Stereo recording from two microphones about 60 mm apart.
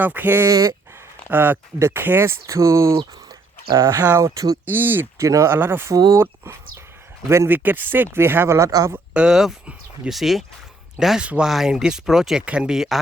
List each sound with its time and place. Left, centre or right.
0.0 s speech: right
0.4 s speech: right
1.3 s speech: right
2.5 s speech: right
4.2 s speech: right
4.6 s speech: right
5.1 s speech: right
5.5 s speech: right
5.9 s speech: right
6.1 s speech: right
7.5 s speech: right
9.1 s speech: centre
11.2 s speech: centre
11.4 s speech: centre